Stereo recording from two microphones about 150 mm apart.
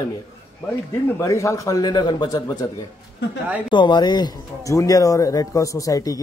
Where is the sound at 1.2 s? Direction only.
20° left (ahead or behind).